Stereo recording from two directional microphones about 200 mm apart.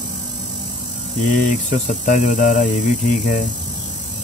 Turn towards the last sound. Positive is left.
turn(degrees=40)  # may be behind; listen again after turning